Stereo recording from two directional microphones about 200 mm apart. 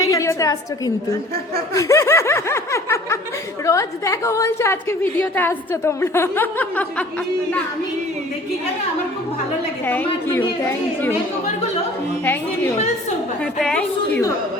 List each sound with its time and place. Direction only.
0.0 s a sound: 15° left (ahead or behind)
1.7 s snicker: 15° left (ahead or behind)
3.7 s a woman's voice: 15° left (ahead or behind)
9.8 s a woman's voice: 10° left (ahead or behind)
13.4 s a woman's voice: 5° left (ahead or behind)